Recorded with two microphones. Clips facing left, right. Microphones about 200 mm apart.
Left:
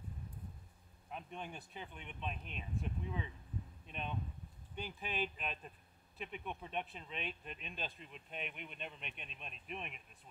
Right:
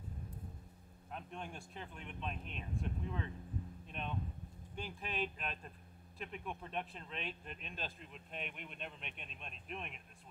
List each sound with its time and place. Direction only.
1.1 s speech: centre (ahead or behind)